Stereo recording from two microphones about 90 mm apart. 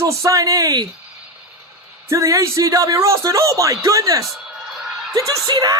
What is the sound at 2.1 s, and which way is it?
A man's voice, 35° right (ahead or behind).